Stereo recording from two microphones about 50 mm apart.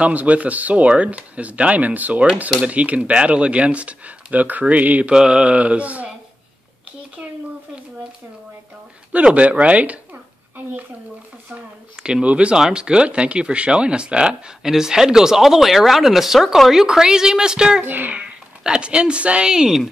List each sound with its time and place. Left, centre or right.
0.0 s speech: right
5.1 s speech: centre
9.1 s speech: right
12.0 s speech: right
17.8 s a child's voice: right
18.1 s speech: right